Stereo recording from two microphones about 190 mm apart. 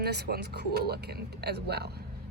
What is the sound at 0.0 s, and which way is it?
A woman's voice, 60° right (ahead or behind).